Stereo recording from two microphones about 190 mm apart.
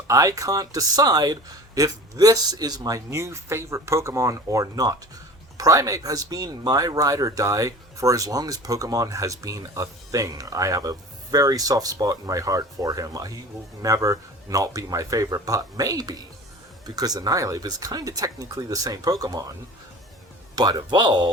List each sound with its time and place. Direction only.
0.1 s speech: 15° right (ahead or behind)
20.6 s speech: 20° right (ahead or behind)